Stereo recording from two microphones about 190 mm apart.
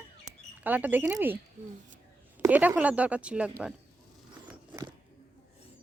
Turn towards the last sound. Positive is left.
turn(degrees=-25)  # may be behind; listen again after turning